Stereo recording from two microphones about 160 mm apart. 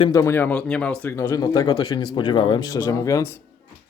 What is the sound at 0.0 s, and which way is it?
Speech, 20° left (ahead or behind).